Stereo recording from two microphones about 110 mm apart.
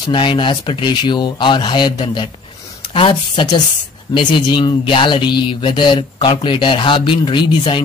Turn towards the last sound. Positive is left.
turn(degrees=45)  # may be behind; listen again after turning